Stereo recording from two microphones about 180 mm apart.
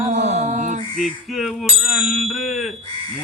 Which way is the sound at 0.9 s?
Centre (ahead or behind).